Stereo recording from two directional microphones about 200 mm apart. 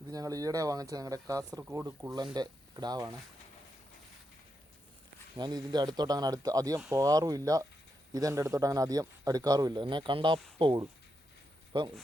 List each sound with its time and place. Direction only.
0.1 s speech: 15° right (ahead or behind)
5.4 s speech: 20° right (ahead or behind)